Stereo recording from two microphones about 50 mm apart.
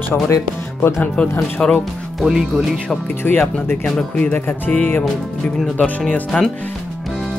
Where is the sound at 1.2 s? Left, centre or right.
Left.